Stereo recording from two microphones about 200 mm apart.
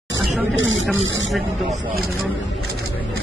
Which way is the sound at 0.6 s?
70° right (ahead or behind).